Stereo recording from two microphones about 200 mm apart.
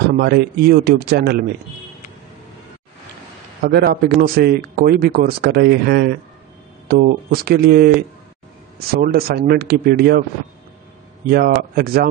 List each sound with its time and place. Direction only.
0.2 s speech: 50° right (ahead or behind)
3.6 s speech: 50° right (ahead or behind)
11.2 s speech: 50° right (ahead or behind)